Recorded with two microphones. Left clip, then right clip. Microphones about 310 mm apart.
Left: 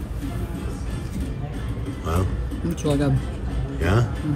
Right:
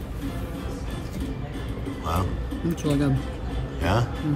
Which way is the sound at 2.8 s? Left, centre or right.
Centre.